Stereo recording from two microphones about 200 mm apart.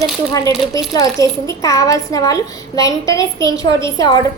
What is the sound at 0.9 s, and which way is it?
A woman's voice, 15° left (ahead or behind).